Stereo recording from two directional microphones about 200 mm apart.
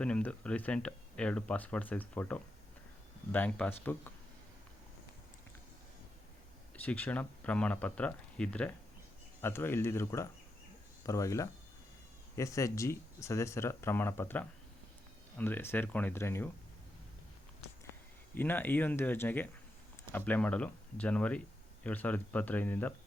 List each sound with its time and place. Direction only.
0.0 s speech: 5° left (ahead or behind)
6.7 s speech: 10° left (ahead or behind)
18.3 s speech: 10° left (ahead or behind)